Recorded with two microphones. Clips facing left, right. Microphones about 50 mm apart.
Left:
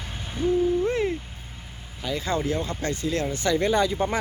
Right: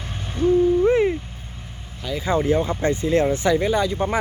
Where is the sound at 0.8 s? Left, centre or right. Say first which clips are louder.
Right 7 dB; centre.